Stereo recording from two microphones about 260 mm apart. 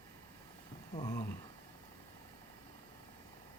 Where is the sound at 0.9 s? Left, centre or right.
Centre.